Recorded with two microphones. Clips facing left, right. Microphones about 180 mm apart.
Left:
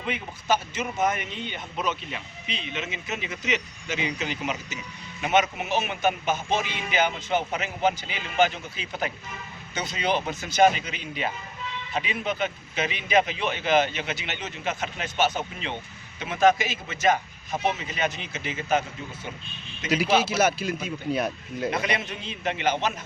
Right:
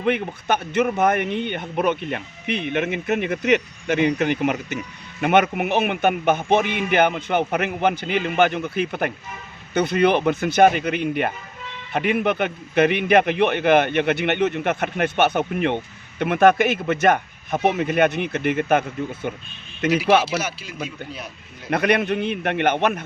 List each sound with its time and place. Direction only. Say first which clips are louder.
0.0 s a man's voice: right 10 dB; 60° right (ahead or behind)
20.3 s speech: left 3 dB; 50° left (ahead or behind)
21.7 s a man's voice: right 12 dB; 60° right (ahead or behind)